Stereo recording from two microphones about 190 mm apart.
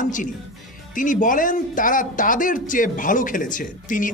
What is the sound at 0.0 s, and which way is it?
Music, 40° left (ahead or behind).